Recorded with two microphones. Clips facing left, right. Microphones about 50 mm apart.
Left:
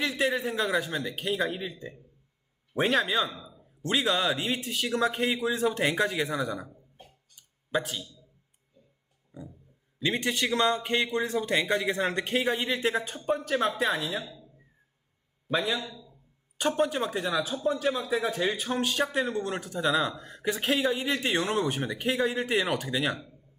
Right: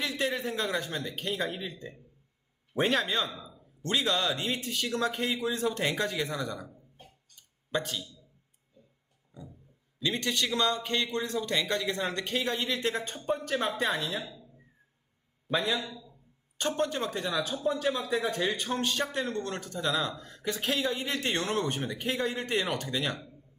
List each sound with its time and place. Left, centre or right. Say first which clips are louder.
0.0 s speech: left 3 dB; centre
7.0 s a sound: left 1 dB; centre
9.3 s a sound: left 4 dB; centre
10.0 s a man's voice: left 2 dB; centre
15.4 s a man's voice: left 1 dB; centre
16.6 s speech: left 3 dB; centre
21.4 s a man's voice: left 2 dB; left